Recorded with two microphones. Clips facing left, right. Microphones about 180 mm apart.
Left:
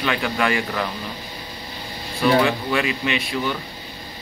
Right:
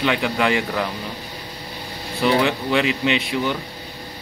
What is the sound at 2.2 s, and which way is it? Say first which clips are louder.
Speech: left 1 dB; 20° right (ahead or behind).